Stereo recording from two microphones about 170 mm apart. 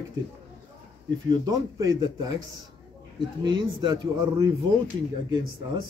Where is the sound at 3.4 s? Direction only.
25° right (ahead or behind).